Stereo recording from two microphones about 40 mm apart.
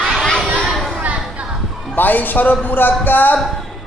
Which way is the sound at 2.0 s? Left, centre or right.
Left.